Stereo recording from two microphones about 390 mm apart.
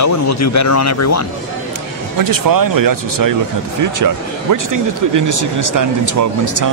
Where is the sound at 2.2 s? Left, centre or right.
Right.